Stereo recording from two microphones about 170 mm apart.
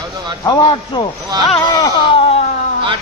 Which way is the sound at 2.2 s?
35° left (ahead or behind).